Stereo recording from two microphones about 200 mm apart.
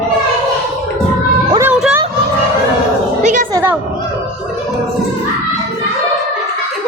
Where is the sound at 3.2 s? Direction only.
40° right (ahead or behind).